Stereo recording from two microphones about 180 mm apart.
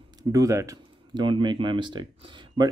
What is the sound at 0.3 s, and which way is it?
Speech, 15° right (ahead or behind).